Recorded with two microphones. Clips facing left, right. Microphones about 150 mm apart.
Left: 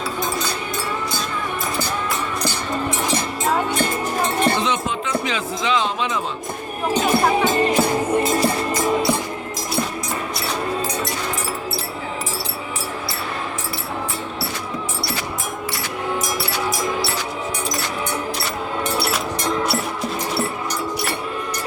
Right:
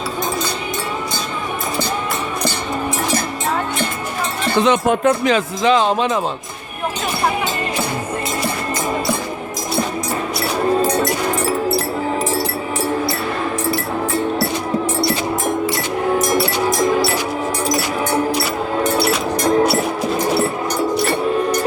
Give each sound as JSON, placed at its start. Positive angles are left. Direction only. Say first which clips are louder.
{"t": 4.5, "sound": "speech", "louder": "right 7 dB", "side_deg": -55}
{"t": 19.5, "sound": "music", "louder": "right 8 dB", "side_deg": -45}